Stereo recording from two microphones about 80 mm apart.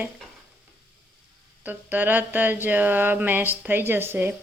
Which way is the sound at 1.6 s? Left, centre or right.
Right.